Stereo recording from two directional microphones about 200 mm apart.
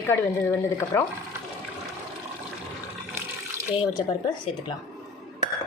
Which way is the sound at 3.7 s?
25° left (ahead or behind).